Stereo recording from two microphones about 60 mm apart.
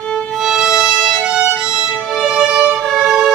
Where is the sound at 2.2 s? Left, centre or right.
Centre.